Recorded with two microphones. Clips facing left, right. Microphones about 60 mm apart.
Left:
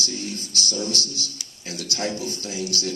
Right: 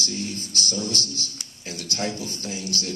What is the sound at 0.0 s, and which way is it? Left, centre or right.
A man's voice, right.